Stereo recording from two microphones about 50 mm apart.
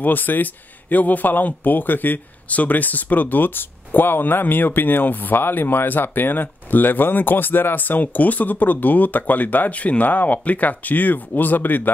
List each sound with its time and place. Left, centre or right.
0.0 s speech: left